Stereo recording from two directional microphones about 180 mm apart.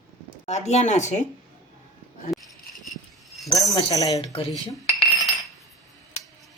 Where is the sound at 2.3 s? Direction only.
Centre (ahead or behind).